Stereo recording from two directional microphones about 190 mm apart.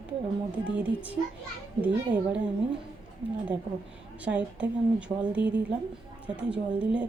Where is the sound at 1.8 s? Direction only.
5° right (ahead or behind).